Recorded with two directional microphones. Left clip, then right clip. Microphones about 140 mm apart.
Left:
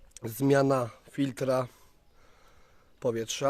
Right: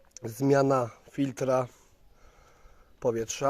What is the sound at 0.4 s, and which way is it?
Speech, 25° left (ahead or behind).